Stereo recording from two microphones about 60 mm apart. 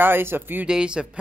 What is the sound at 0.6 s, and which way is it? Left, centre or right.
Speech, centre.